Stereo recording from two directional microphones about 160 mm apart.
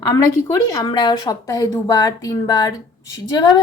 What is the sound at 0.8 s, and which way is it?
A woman's voice, 25° left (ahead or behind).